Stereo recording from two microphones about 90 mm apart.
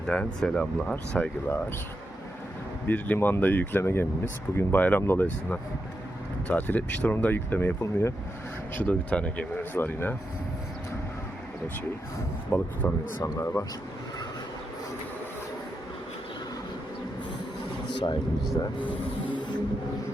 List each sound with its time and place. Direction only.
0.0 s speech: 10° left (ahead or behind)
2.8 s speech: 20° left (ahead or behind)
12.5 s speech: 15° left (ahead or behind)
13.2 s speech: 30° left (ahead or behind)
17.9 s a sound: 60° left (ahead or behind)